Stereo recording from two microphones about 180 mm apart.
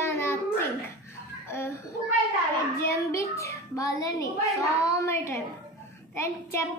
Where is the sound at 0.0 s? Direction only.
15° left (ahead or behind).